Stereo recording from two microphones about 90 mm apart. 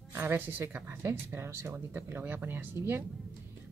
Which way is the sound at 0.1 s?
25° right (ahead or behind).